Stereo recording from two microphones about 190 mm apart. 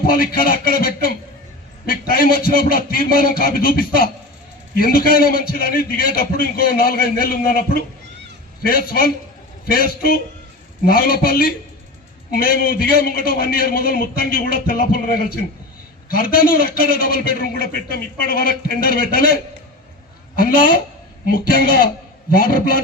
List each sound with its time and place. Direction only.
0.1 s a man's voice: 50° left (ahead or behind)